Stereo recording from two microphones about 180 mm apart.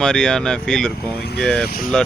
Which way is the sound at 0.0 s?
5° left (ahead or behind).